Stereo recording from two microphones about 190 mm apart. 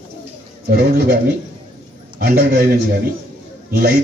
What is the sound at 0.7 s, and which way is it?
Speech, 55° right (ahead or behind).